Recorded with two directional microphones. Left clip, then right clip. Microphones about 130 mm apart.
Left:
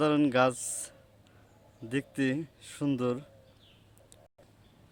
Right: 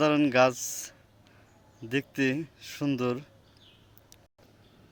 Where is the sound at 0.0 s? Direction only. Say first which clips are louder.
Right 3 dB; 15° left (ahead or behind).